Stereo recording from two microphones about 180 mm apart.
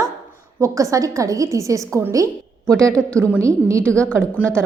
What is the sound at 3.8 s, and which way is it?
Speech, 5° left (ahead or behind).